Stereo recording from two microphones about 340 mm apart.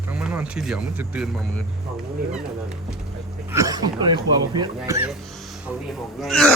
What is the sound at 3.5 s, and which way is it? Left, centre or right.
Speech, centre.